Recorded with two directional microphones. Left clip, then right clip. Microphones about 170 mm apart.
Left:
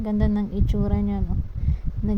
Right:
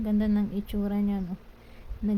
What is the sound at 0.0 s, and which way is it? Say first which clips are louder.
A woman's voice: left 2 dB; 15° left (ahead or behind).